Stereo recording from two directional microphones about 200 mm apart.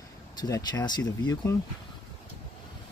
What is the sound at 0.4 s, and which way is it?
Speech, 20° left (ahead or behind).